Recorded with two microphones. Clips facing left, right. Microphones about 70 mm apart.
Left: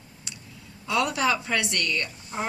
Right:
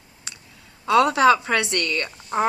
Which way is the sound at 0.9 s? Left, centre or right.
Right.